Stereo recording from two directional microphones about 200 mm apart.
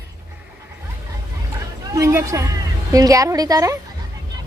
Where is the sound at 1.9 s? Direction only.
15° right (ahead or behind).